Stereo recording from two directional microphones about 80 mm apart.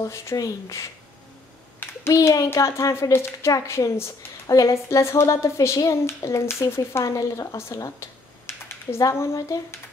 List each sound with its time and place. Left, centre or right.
0.0 s a woman's voice: left
2.1 s a woman's voice: left